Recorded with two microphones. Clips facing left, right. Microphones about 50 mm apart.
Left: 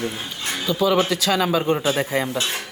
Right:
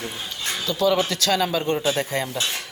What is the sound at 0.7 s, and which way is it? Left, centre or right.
Speech, centre.